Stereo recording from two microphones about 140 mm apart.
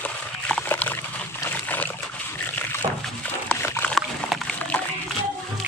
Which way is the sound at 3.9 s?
5° left (ahead or behind).